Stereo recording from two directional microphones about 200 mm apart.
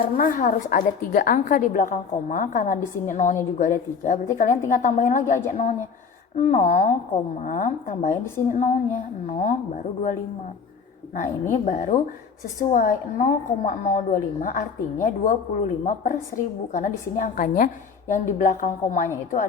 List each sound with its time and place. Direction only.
0.2 s a woman's voice: 40° left (ahead or behind)
11.1 s a woman's voice: 40° left (ahead or behind)